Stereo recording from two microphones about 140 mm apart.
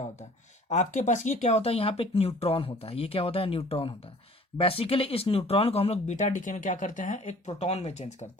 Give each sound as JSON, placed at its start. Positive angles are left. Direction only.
{"t": 0.7, "sound": "speech", "side_deg": 60}